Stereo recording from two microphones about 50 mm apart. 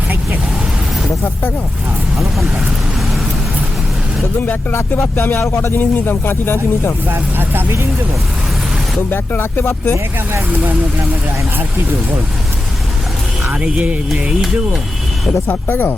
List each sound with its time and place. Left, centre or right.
4.7 s speech: left
7.1 s speech: right
9.0 s speech: left
14.1 s speech: centre
15.4 s speech: left